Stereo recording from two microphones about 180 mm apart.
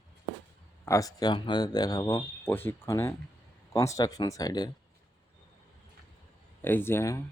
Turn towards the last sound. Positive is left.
turn(degrees=15)  # may be behind; listen again after turning